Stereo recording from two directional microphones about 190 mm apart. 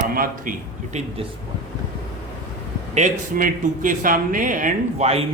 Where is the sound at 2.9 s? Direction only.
45° right (ahead or behind).